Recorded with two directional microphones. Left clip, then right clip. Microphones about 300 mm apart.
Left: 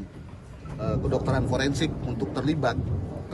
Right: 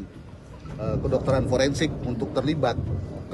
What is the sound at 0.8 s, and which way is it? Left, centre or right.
A man's voice, centre.